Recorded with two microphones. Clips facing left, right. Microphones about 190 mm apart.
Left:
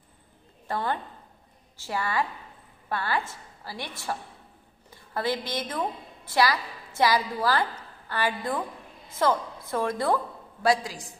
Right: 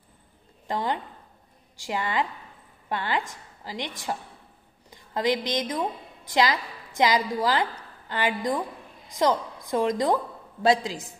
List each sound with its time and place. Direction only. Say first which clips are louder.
0.7 s a woman's voice: right 1 dB; 15° right (ahead or behind)